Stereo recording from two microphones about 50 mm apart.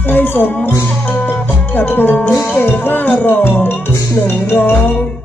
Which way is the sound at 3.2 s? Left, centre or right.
Left.